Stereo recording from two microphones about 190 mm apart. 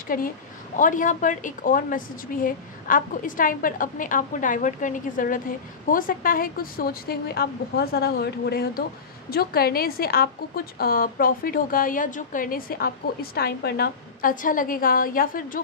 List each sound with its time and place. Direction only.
0.1 s a woman's voice: 50° left (ahead or behind)